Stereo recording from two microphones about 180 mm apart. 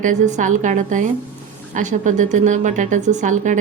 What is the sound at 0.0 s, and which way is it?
A woman's voice, 40° right (ahead or behind).